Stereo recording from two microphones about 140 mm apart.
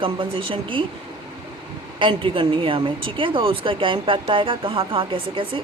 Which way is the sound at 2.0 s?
40° right (ahead or behind).